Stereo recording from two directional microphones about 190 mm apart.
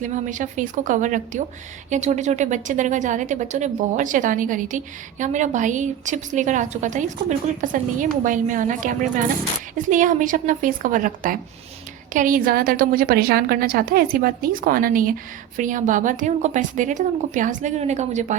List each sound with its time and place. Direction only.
0.0 s a woman's voice: 40° right (ahead or behind)